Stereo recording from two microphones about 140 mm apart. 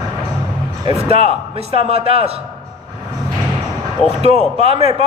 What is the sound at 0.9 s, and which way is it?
A man's voice, 45° right (ahead or behind).